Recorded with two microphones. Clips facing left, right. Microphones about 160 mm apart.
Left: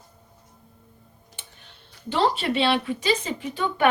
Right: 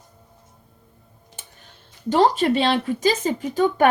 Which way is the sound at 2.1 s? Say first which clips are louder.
Right 6 dB; 40° right (ahead or behind).